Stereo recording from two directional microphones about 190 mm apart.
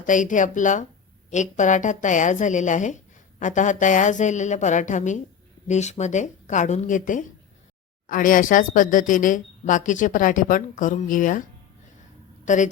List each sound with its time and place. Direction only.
0.0 s a woman's voice: 40° left (ahead or behind)
12.5 s a woman's voice: 40° left (ahead or behind)